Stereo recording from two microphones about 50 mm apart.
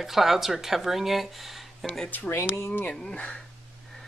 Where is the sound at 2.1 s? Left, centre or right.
Left.